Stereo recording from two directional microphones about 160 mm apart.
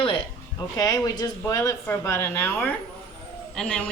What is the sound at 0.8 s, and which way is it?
A woman's voice, 25° left (ahead or behind).